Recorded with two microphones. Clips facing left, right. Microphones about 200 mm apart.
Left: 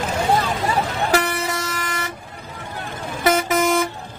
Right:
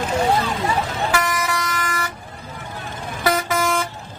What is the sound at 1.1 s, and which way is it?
Vehicle, 35° left (ahead or behind).